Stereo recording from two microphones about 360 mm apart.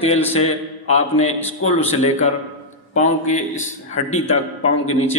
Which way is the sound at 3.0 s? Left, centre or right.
Centre.